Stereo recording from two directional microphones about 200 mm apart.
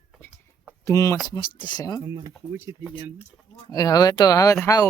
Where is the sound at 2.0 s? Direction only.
15° right (ahead or behind).